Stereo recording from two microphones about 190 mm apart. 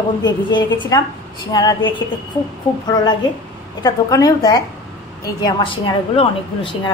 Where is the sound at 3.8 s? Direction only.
20° left (ahead or behind).